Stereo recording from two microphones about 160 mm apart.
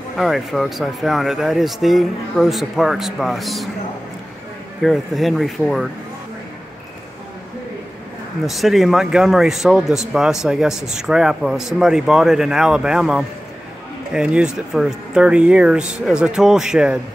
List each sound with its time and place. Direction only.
0.2 s speech: centre (ahead or behind)
4.8 s speech: centre (ahead or behind)
8.5 s speech: centre (ahead or behind)